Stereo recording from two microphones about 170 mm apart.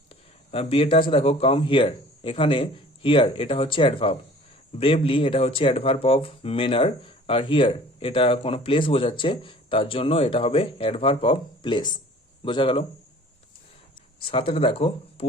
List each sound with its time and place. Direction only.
0.1 s speech: 35° left (ahead or behind)
14.2 s speech: 30° left (ahead or behind)